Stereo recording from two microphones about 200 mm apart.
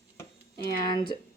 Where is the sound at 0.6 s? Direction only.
25° left (ahead or behind).